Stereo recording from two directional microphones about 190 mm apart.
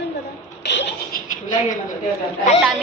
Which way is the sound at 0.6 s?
65° left (ahead or behind).